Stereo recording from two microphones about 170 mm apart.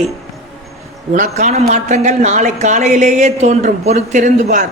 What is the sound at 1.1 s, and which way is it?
Speech, 45° right (ahead or behind).